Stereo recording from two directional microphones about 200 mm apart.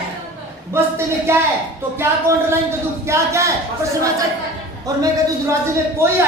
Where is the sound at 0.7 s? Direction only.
10° right (ahead or behind).